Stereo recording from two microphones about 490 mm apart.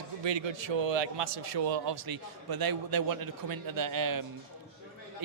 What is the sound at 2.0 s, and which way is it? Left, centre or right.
A man's voice, right.